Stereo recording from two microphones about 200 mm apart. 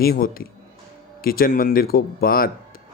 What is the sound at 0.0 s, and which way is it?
Speech, 45° left (ahead or behind).